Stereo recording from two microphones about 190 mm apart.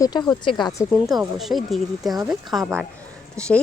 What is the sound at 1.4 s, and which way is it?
Speech, centre (ahead or behind).